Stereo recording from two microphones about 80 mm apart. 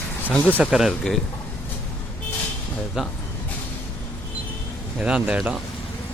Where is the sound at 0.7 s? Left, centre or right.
Centre.